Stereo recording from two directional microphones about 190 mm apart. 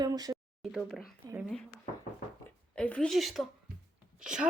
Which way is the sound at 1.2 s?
20° right (ahead or behind).